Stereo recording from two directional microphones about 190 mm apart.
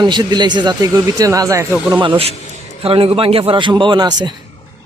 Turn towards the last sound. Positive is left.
turn(degrees=-20)  # may be behind; listen again after turning